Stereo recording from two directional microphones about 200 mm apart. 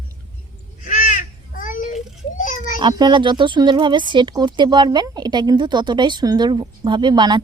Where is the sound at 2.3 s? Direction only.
40° left (ahead or behind).